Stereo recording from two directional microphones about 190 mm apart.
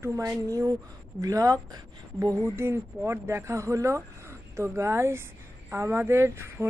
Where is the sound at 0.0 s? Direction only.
15° right (ahead or behind).